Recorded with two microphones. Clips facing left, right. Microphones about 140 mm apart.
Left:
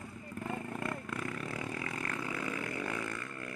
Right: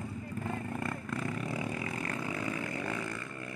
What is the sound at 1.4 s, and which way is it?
Vehicle, 20° right (ahead or behind).